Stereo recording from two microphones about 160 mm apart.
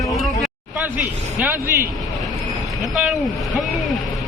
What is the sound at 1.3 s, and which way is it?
Speech, 10° right (ahead or behind).